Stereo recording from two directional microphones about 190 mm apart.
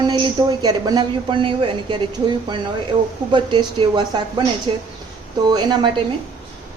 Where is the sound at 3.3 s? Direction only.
25° right (ahead or behind).